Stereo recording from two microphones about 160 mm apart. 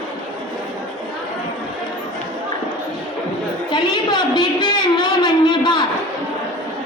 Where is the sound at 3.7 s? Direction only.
25° left (ahead or behind).